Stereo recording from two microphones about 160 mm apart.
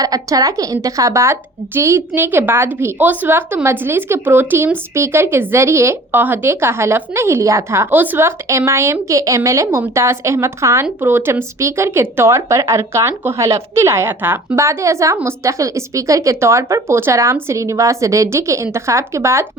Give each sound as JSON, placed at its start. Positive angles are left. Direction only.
{"t": 0.0, "sound": "a woman's voice", "side_deg": -20}